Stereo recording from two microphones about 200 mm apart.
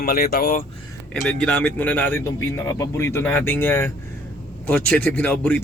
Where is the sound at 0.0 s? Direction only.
50° left (ahead or behind).